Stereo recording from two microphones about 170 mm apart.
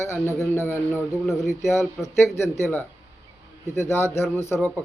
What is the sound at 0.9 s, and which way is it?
Speech, centre (ahead or behind).